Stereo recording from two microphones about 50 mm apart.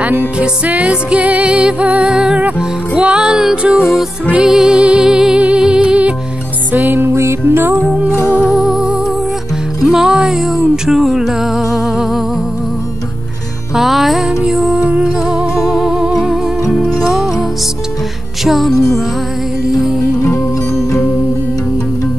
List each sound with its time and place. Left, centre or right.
0.0 s music: right
0.4 s music: right
6.7 s music: right
7.2 s music: right
8.2 s music: left
8.5 s music: centre
13.7 s music: centre
15.5 s music: centre
15.9 s music: centre
18.4 s music: centre